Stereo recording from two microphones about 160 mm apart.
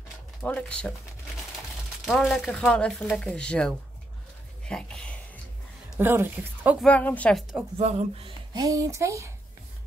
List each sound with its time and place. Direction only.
0.4 s a woman's voice: 5° left (ahead or behind)
2.0 s speech: centre (ahead or behind)
4.6 s a sound: 5° left (ahead or behind)
5.9 s a woman's voice: 15° right (ahead or behind)
6.8 s a woman's voice: 10° left (ahead or behind)
7.8 s speech: 40° right (ahead or behind); by 9.3 s 20° right (ahead or behind)